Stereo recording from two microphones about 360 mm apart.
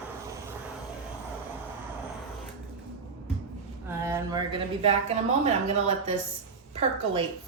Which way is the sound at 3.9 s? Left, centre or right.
Centre.